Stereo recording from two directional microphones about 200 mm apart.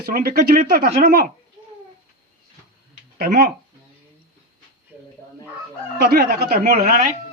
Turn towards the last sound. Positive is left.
turn(degrees=-45)  # may be behind; listen again after turning